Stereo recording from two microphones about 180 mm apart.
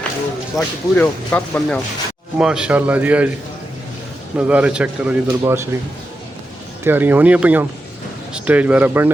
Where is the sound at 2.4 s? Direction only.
5° right (ahead or behind).